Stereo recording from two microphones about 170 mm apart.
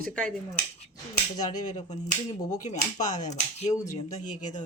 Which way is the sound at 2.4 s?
45° left (ahead or behind).